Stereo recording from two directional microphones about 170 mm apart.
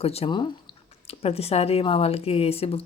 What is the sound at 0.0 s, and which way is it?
Speech, 35° left (ahead or behind).